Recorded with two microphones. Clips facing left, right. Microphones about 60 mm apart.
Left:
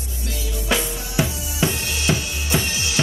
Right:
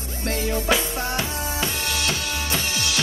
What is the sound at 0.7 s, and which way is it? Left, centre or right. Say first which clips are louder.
Music: left 1 dB; centre.